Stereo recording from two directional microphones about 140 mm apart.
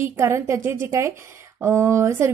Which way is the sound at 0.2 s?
20° right (ahead or behind).